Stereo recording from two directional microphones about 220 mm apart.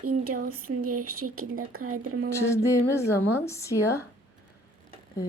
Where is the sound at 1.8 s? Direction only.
85° right.